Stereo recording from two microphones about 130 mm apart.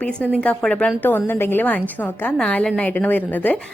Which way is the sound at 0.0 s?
10° left (ahead or behind).